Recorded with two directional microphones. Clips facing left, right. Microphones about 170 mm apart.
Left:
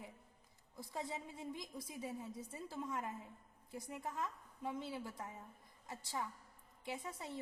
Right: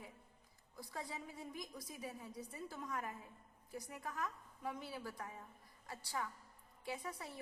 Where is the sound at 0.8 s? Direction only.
25° left (ahead or behind).